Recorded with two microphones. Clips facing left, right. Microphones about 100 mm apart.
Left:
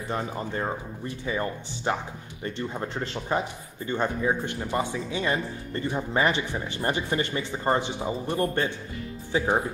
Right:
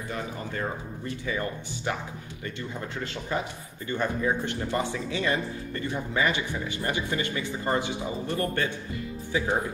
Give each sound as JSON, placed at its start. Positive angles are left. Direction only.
{"t": 0.1, "sound": "speech", "side_deg": 25}
{"t": 3.8, "sound": "speech", "side_deg": 25}